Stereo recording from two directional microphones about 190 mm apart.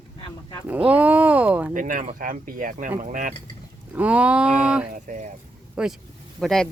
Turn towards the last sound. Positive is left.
turn(degrees=0)  # may be behind; listen again after turning